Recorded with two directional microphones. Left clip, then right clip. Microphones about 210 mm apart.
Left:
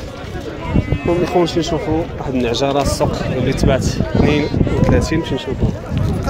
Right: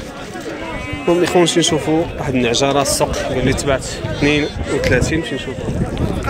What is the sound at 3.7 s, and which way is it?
Speech, 15° left (ahead or behind).